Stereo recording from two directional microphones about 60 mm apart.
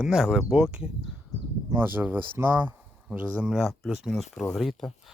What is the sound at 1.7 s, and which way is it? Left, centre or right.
Speech, right.